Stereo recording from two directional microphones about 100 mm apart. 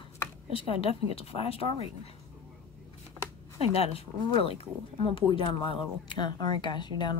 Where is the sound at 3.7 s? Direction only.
80° left.